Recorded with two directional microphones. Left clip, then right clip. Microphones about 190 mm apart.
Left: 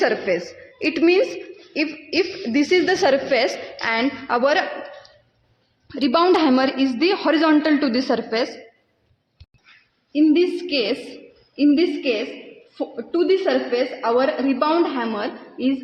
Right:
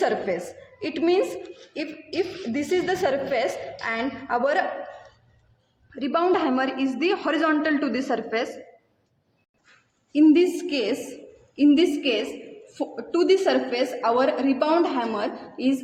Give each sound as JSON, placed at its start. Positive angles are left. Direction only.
{"t": 0.3, "sound": "a woman's voice", "side_deg": 35}
{"t": 5.9, "sound": "a woman's voice", "side_deg": 50}
{"t": 10.1, "sound": "a woman's voice", "side_deg": 35}